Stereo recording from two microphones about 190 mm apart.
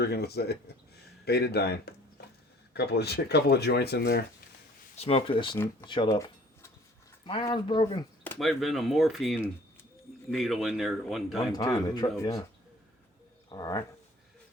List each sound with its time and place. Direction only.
0.0 s speech: 60° left (ahead or behind)
4.9 s speech: 30° left (ahead or behind)
8.2 s a sound: 10° left (ahead or behind)
8.4 s a man's voice: centre (ahead or behind)
11.5 s speech: 20° left (ahead or behind)
13.5 s speech: 20° left (ahead or behind)